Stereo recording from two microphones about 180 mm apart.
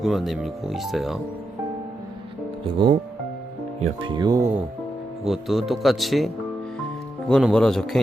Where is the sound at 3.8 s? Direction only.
35° right (ahead or behind); by 4.6 s 20° right (ahead or behind).